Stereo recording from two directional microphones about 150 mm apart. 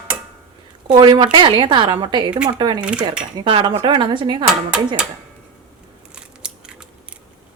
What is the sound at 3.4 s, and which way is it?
Speech, 35° right (ahead or behind).